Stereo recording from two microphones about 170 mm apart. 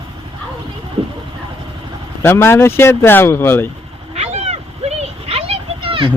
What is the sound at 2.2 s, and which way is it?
Speech, 15° left (ahead or behind).